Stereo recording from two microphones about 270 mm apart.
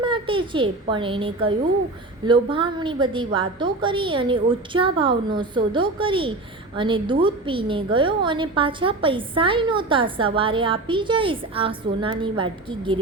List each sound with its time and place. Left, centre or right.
0.0 s a child's voice: centre